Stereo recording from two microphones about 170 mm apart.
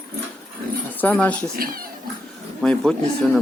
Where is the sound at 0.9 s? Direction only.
10° left (ahead or behind).